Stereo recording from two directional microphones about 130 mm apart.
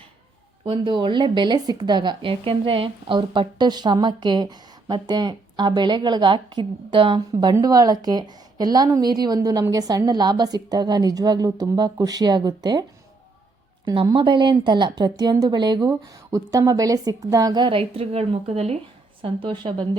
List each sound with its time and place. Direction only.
0.6 s speech: 40° right (ahead or behind)
7.5 s speech: 30° right (ahead or behind)
13.8 s speech: 35° right (ahead or behind); by 18.8 s 55° right (ahead or behind)
19.2 s speech: 40° right (ahead or behind)